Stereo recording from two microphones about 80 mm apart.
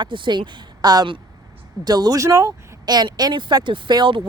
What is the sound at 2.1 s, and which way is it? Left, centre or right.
Speech, right.